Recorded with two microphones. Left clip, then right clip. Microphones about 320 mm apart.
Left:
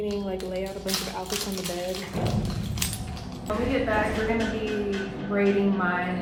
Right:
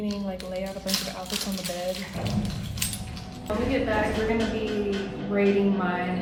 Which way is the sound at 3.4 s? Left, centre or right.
Centre.